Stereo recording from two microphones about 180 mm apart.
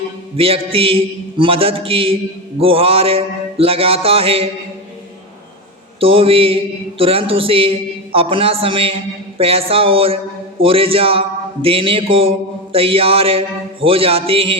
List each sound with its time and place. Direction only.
0.3 s a man's voice: 30° right (ahead or behind)
6.0 s a man's voice: 30° right (ahead or behind)